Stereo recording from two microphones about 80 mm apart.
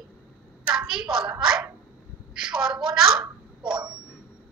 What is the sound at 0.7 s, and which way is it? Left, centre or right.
Clapping, centre.